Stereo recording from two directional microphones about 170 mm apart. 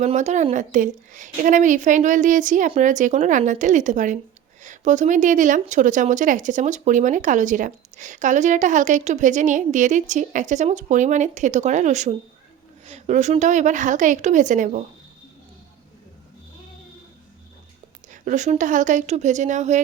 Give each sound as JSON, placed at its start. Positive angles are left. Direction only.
{"t": 0.0, "sound": "speech", "side_deg": -40}
{"t": 18.1, "sound": "speech", "side_deg": -45}